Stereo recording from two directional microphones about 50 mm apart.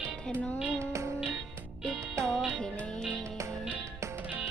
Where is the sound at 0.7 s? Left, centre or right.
Right.